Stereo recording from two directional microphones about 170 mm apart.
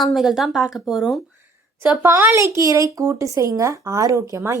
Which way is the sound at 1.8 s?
15° right (ahead or behind).